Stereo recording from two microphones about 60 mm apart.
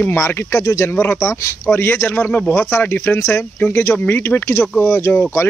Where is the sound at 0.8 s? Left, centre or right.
Left.